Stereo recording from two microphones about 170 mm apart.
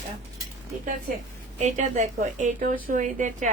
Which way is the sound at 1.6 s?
45° right (ahead or behind).